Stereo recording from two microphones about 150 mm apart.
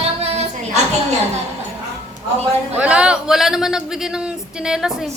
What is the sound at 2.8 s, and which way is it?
A man's voice, 10° right (ahead or behind).